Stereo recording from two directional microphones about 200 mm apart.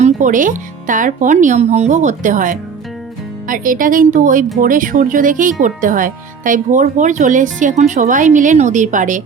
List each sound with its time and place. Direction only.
0.0 s speech: 40° right (ahead or behind)